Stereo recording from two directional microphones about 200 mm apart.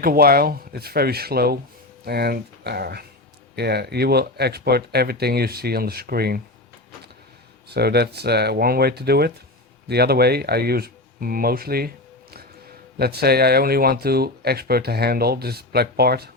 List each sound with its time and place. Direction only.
0.0 s speech: 50° right (ahead or behind)
7.7 s speech: 55° right (ahead or behind)
13.0 s speech: 50° right (ahead or behind)